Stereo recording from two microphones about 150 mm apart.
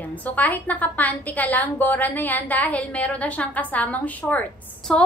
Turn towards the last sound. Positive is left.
turn(degrees=5)  # may be behind; listen again after turning